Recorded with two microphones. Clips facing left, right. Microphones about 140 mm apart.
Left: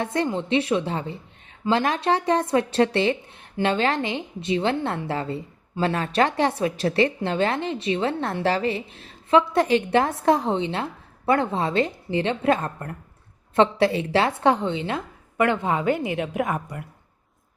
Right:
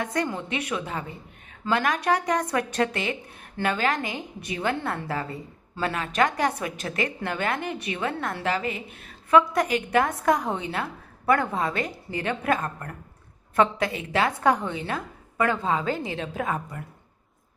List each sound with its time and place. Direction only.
0.0 s a woman's voice: 25° left (ahead or behind)